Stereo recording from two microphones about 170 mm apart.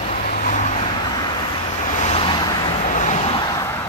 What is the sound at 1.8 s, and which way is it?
Vehicle, 45° left (ahead or behind).